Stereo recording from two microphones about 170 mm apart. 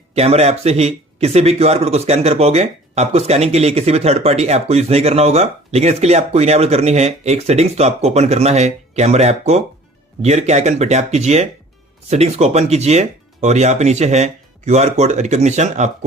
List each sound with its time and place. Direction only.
0.1 s speech: 40° right (ahead or behind)